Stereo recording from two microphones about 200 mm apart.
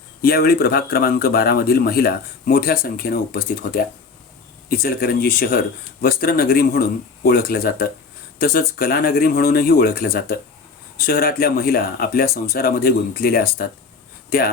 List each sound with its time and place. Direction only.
0.2 s speech: 50° left (ahead or behind)